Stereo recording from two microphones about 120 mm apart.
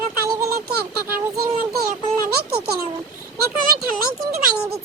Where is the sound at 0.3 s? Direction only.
25° right (ahead or behind).